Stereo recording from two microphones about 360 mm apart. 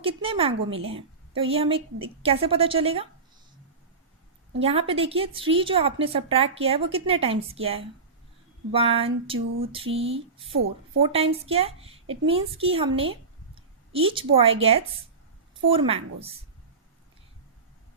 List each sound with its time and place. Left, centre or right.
0.0 s a woman's voice: centre
4.6 s a woman's voice: centre
10.5 s speech: right
11.1 s a woman's voice: centre